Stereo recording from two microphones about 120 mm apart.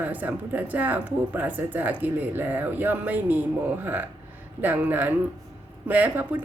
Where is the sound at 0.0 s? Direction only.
15° right (ahead or behind).